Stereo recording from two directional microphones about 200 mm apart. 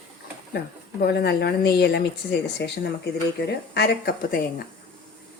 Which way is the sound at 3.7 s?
55° left (ahead or behind).